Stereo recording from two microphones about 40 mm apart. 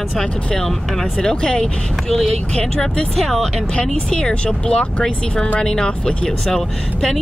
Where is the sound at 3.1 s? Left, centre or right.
Centre.